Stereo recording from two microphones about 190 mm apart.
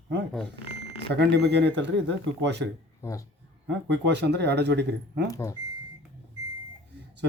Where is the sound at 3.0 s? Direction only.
15° left (ahead or behind).